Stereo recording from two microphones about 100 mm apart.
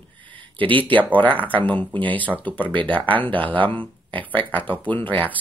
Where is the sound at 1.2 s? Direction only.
15° left (ahead or behind).